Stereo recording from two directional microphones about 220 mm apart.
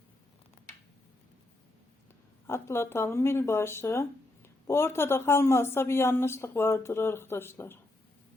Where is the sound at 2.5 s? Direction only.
10° left (ahead or behind).